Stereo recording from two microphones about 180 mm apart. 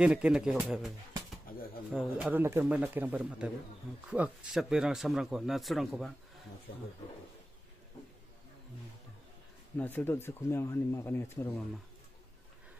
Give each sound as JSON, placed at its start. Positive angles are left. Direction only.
{"t": 0.0, "sound": "a man's voice", "side_deg": -5}
{"t": 1.5, "sound": "bird", "side_deg": 50}
{"t": 1.9, "sound": "a man's voice", "side_deg": -5}
{"t": 9.8, "sound": "speech", "side_deg": 10}